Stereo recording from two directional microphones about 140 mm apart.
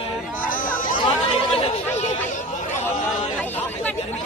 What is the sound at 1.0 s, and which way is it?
Chatter, 40° left (ahead or behind).